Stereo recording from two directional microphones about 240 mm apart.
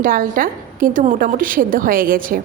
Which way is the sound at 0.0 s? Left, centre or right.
Right.